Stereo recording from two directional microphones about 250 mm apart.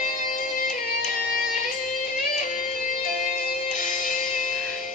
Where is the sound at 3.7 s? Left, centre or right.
Left.